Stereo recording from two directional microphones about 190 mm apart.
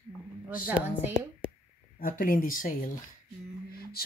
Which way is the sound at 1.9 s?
50° left (ahead or behind).